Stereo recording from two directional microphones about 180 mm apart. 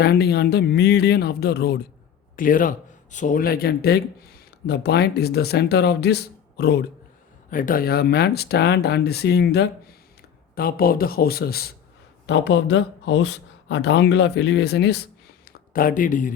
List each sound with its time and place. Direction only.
0.0 s speech: 60° left (ahead or behind)
2.3 s speech: 50° left (ahead or behind); by 6.8 s 65° left (ahead or behind)
7.5 s speech: 50° left (ahead or behind)
12.2 s speech: 75° left (ahead or behind)
15.7 s speech: 50° left (ahead or behind)